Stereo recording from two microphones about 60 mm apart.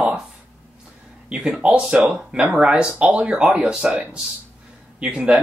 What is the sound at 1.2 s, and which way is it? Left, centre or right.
Speech, centre.